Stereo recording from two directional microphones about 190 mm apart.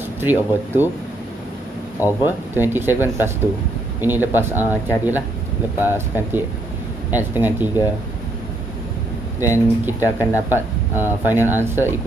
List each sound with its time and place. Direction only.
0.2 s speech: 10° right (ahead or behind)
2.2 s speech: 10° right (ahead or behind)
9.4 s speech: 10° right (ahead or behind)
9.9 s speech: 15° left (ahead or behind)
10.5 s speech: 10° right (ahead or behind)